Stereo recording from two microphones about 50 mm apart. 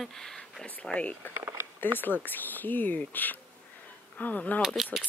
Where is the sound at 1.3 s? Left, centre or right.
Right.